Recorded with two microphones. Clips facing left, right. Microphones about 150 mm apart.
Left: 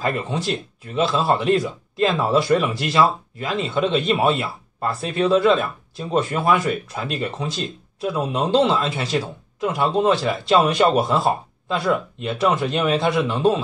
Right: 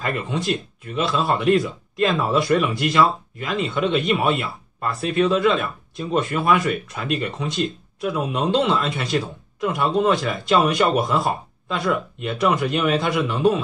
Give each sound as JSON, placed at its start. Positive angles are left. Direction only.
{"t": 0.0, "sound": "a man's voice", "side_deg": 35}